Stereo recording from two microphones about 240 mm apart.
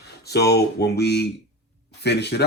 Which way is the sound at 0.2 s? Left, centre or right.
Left.